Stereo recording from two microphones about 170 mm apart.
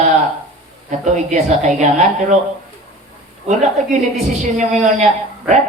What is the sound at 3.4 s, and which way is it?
A woman's voice, 45° right (ahead or behind).